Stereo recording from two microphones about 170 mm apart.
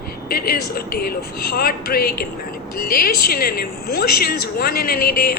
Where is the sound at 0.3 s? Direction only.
60° left (ahead or behind).